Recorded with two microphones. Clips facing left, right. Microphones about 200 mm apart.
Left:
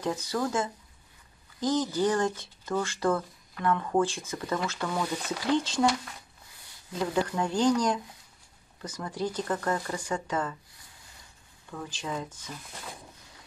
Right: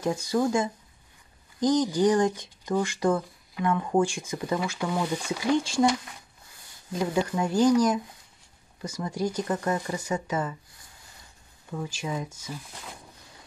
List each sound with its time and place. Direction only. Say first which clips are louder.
0.0 s speech: right 4 dB; 10° right (ahead or behind)
11.7 s speech: right 3 dB; 10° right (ahead or behind)